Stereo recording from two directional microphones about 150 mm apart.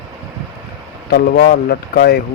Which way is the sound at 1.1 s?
90° left.